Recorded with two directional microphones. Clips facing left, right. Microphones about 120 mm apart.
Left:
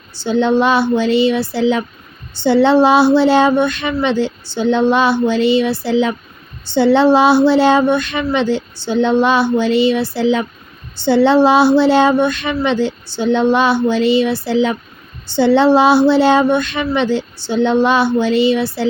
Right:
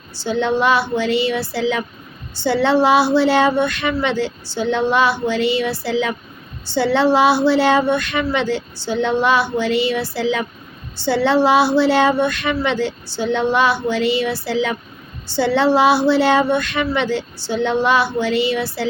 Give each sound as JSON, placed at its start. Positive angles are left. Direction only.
{"t": 0.1, "sound": "a woman's voice", "side_deg": 20}